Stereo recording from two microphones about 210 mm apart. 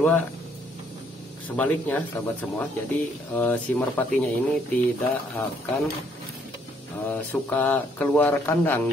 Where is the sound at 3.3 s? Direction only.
5° left (ahead or behind).